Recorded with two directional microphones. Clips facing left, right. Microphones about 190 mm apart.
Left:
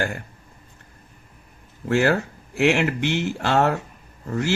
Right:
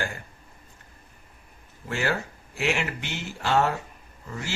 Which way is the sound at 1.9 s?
60° left (ahead or behind).